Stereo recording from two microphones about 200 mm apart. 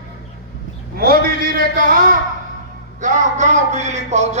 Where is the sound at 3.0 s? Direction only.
40° right (ahead or behind).